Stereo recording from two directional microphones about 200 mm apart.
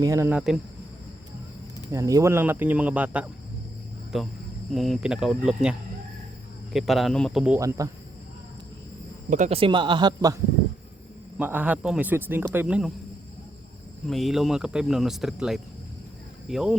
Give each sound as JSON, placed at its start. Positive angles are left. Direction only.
{"t": 0.0, "sound": "speech", "side_deg": -15}
{"t": 1.9, "sound": "speech", "side_deg": -15}
{"t": 6.7, "sound": "speech", "side_deg": 0}
{"t": 7.6, "sound": "speech", "side_deg": -15}
{"t": 9.3, "sound": "speech", "side_deg": -35}
{"t": 11.3, "sound": "speech", "side_deg": -10}
{"t": 14.1, "sound": "speech", "side_deg": 0}